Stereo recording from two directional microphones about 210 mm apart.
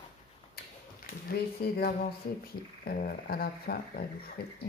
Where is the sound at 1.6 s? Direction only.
45° left (ahead or behind).